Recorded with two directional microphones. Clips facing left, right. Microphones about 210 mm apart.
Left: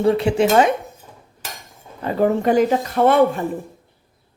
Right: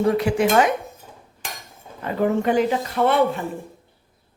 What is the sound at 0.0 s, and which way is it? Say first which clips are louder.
Speech: left 2 dB; 30° left (ahead or behind).